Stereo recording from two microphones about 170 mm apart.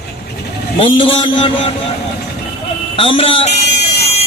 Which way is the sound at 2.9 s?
30° left (ahead or behind).